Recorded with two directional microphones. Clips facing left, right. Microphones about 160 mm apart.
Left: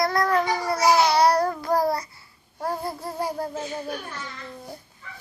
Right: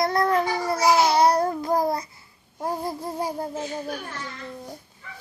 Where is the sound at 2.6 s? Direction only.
15° right (ahead or behind).